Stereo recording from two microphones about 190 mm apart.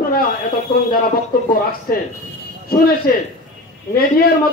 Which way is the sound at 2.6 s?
55° left (ahead or behind).